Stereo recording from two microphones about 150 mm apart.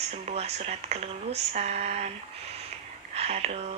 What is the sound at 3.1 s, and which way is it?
Speech, 45° right (ahead or behind).